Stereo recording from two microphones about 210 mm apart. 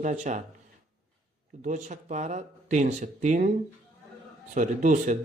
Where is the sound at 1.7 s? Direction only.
35° right (ahead or behind).